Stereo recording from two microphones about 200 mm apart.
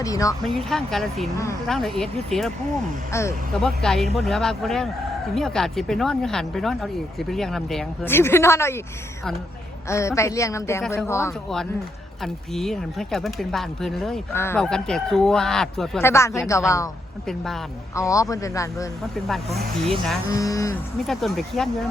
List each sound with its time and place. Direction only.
0.0 s a woman's voice: 15° left (ahead or behind)
0.4 s speech: centre (ahead or behind)
3.1 s a woman's voice: 15° left (ahead or behind)
3.5 s speech: centre (ahead or behind)
9.9 s a woman's voice: 15° left (ahead or behind)
12.2 s speech: centre (ahead or behind)
16.0 s a woman's voice: 15° left (ahead or behind)
17.2 s speech: centre (ahead or behind)
17.9 s a woman's voice: 15° left (ahead or behind)
19.3 s speech: centre (ahead or behind)
20.3 s a woman's voice: 15° left (ahead or behind)
21.1 s speech: centre (ahead or behind)